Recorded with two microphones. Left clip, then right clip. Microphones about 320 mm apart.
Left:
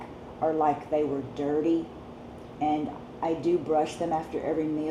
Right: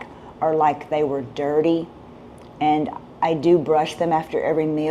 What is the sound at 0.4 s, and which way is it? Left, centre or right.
A woman's voice, right.